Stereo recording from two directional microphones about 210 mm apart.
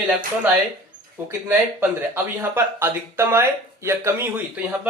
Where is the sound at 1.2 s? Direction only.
10° right (ahead or behind).